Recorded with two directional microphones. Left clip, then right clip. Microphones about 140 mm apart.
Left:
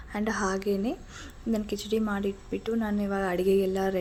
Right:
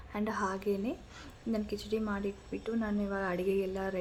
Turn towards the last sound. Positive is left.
turn(degrees=35)  # may be behind; listen again after turning